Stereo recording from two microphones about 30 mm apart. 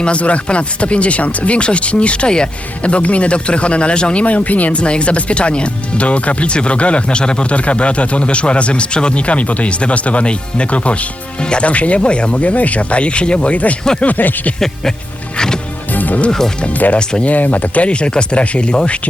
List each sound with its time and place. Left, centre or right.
0.0 s speech: left
2.8 s speech: left
4.2 s speech: left
4.7 s speech: left
7.5 s speech: left
11.3 s speech: left
11.6 s speech: left
12.4 s speech: left
13.5 s speech: left
14.0 s speech: left
15.9 s music: left
17.0 s speech: left
17.2 s speech: left
17.8 s speech: left